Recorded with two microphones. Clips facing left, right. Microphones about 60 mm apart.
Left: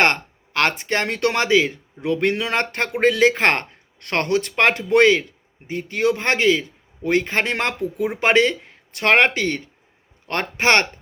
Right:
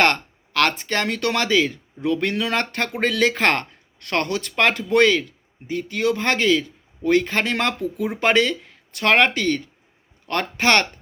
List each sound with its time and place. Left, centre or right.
0.0 s speech: left
1.5 s speech: centre
1.7 s a man's voice: left